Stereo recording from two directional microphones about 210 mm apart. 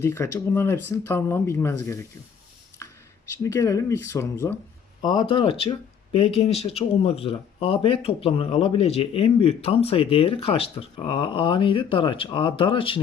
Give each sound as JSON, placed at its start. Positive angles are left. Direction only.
{"t": 0.0, "sound": "speech", "side_deg": 10}
{"t": 2.8, "sound": "a sound", "side_deg": 15}
{"t": 3.3, "sound": "speech", "side_deg": 15}